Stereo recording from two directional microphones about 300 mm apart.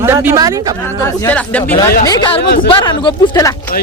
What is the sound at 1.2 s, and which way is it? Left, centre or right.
Speech, centre.